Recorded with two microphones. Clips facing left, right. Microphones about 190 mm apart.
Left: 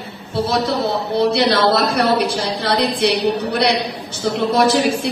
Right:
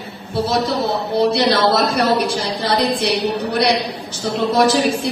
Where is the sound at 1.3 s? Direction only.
60° left (ahead or behind).